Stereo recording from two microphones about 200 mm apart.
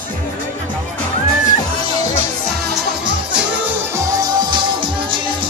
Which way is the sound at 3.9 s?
20° right (ahead or behind).